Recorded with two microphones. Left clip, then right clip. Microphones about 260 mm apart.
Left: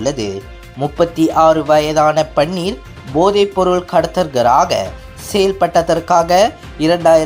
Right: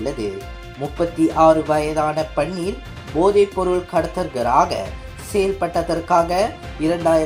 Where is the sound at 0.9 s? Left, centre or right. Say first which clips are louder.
Left 4 dB; left.